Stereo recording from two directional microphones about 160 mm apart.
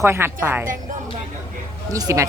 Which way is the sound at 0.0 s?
15° right (ahead or behind).